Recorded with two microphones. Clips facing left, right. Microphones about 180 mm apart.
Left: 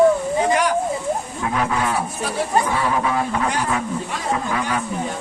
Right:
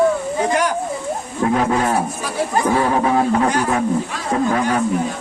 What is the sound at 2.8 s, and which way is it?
A man's voice, 40° right (ahead or behind).